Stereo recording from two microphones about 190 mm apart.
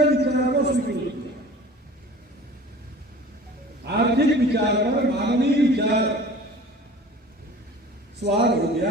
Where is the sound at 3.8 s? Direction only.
60° right (ahead or behind).